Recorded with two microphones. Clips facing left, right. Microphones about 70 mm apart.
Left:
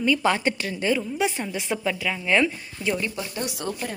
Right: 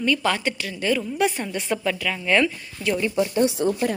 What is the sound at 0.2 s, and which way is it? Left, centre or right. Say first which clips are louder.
Speech: left 1 dB; left.